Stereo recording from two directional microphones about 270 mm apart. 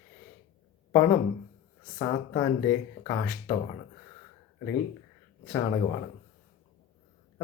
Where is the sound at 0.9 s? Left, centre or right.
Centre.